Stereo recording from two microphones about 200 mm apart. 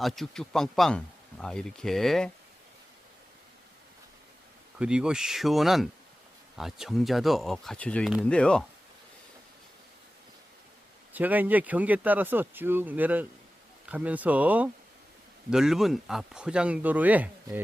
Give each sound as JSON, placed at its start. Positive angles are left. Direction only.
{"t": 0.0, "sound": "speech", "side_deg": 0}
{"t": 4.8, "sound": "speech", "side_deg": -5}
{"t": 11.1, "sound": "speech", "side_deg": -10}